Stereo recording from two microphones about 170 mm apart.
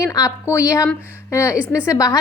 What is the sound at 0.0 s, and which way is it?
A woman's voice, 20° left (ahead or behind).